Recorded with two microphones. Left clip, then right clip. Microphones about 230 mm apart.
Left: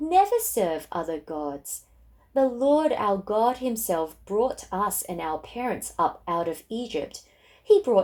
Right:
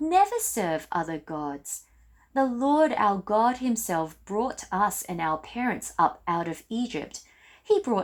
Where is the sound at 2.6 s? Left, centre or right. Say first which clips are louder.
Right 3 dB; right.